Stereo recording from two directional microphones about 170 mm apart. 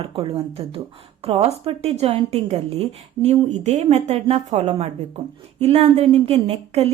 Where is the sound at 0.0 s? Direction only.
35° right (ahead or behind).